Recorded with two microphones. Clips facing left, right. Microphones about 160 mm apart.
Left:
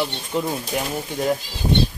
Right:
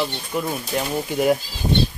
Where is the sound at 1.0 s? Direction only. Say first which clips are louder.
Right 6 dB; 10° right (ahead or behind).